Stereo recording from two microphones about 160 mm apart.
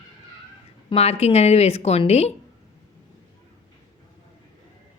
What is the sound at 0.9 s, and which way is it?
A woman's voice, 40° left (ahead or behind).